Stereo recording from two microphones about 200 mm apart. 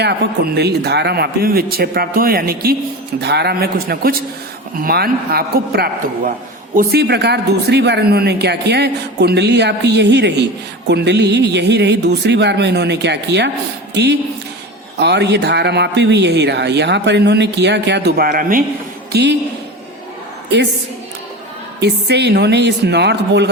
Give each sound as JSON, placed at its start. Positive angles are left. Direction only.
{"t": 0.0, "sound": "speech", "side_deg": -55}
{"t": 19.1, "sound": "speech", "side_deg": -60}
{"t": 21.8, "sound": "speech", "side_deg": -55}